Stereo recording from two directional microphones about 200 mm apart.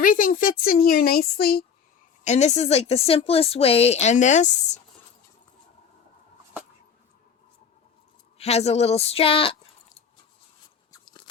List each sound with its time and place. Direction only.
0.0 s a woman's voice: 45° left (ahead or behind)
2.2 s a woman's voice: 35° left (ahead or behind)
8.4 s a woman's voice: 30° left (ahead or behind)
10.9 s crunch: 20° left (ahead or behind)